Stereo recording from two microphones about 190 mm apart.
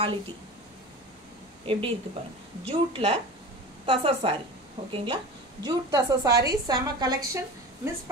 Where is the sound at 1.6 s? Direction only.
30° right (ahead or behind).